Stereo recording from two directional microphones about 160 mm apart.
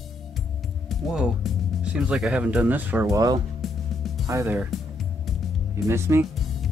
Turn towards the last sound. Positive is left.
turn(degrees=-15)  # may be behind; listen again after turning